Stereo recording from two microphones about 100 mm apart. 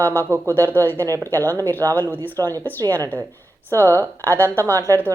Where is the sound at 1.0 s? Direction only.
30° right (ahead or behind).